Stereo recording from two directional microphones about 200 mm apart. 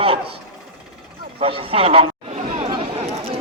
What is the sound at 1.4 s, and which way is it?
Speech, 25° right (ahead or behind).